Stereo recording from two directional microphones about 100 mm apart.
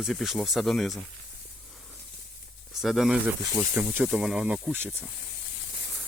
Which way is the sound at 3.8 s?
20° right (ahead or behind).